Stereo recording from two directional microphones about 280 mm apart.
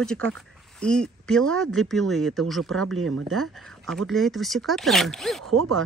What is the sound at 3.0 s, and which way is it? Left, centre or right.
Speech, right.